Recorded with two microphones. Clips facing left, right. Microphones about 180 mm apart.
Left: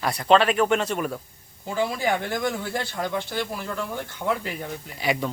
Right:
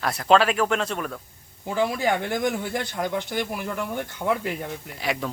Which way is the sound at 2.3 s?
15° right (ahead or behind).